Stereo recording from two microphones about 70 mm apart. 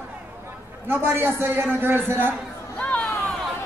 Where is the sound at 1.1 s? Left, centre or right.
Right.